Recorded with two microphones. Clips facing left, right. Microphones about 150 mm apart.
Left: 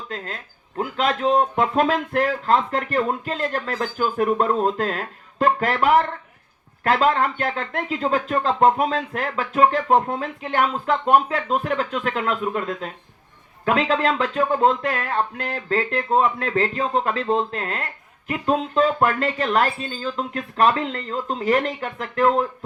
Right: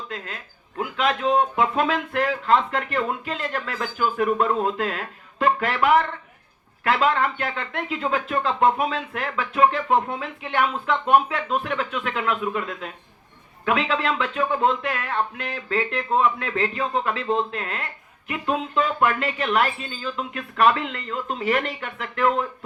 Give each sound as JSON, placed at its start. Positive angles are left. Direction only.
{"t": 0.8, "sound": "a man's voice", "side_deg": 40}